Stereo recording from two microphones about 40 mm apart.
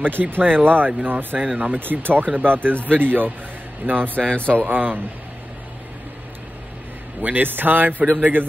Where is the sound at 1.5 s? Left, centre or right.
Right.